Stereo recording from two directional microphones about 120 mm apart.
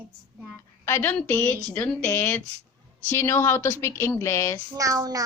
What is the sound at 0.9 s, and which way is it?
A woman's voice, 20° left (ahead or behind).